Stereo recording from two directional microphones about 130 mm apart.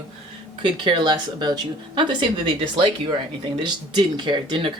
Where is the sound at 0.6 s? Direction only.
40° right (ahead or behind).